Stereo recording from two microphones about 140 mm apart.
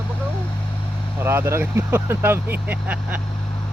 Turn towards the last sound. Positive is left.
turn(degrees=-10)  # may be behind; listen again after turning